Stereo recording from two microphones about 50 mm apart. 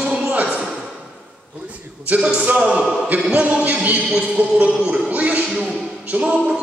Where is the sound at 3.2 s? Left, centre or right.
Centre.